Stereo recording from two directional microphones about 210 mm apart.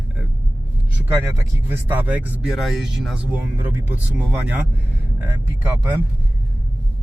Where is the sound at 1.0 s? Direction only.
10° right (ahead or behind).